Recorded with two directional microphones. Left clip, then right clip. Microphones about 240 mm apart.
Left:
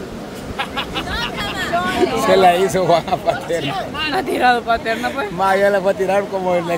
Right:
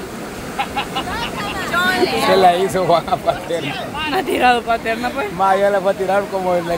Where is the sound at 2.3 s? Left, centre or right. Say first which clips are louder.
Left 1 dB; centre.